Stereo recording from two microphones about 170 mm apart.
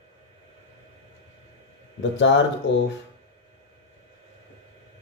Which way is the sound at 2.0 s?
90° left.